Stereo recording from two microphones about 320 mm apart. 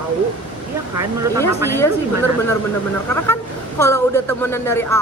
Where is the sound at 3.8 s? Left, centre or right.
Centre.